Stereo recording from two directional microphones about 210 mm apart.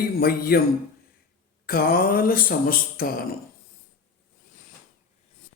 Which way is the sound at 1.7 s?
45° left (ahead or behind).